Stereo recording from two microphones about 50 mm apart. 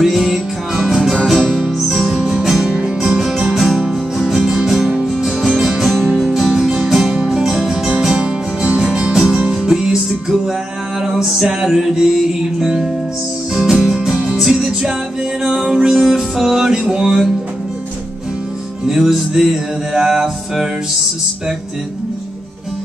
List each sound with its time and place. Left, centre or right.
0.0 s music: centre
4.8 s music: right
5.1 s music: centre
18.9 s music: centre